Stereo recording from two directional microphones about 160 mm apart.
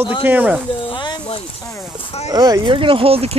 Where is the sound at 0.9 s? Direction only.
30° left (ahead or behind).